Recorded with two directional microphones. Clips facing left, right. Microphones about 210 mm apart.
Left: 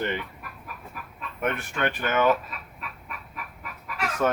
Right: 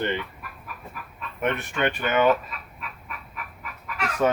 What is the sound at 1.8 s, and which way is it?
Speech, 15° right (ahead or behind).